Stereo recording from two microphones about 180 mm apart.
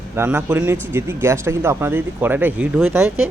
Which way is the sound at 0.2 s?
10° right (ahead or behind).